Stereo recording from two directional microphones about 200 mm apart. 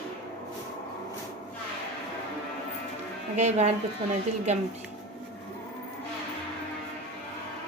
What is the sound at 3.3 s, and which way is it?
Speech, 35° right (ahead or behind).